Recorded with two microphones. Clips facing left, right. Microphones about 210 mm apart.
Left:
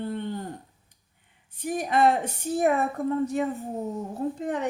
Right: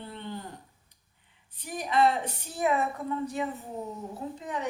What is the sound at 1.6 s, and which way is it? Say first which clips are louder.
Speech: left 3 dB; 50° left (ahead or behind).